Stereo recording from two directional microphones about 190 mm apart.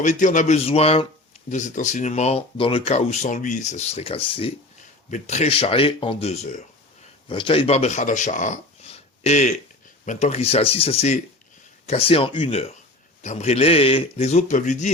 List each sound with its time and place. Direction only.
0.0 s speech: 40° left (ahead or behind)